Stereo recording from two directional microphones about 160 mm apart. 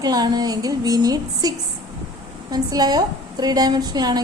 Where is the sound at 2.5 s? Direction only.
25° right (ahead or behind).